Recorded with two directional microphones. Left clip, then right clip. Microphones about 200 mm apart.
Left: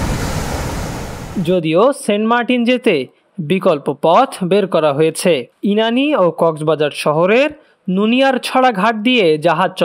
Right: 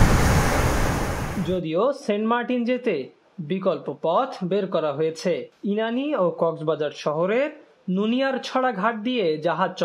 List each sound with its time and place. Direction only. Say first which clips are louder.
1.5 s speech: left 10 dB; 45° left (ahead or behind)